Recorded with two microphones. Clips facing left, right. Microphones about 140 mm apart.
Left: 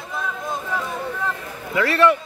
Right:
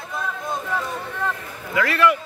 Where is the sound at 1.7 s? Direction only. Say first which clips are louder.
Left 2 dB; 30° left (ahead or behind).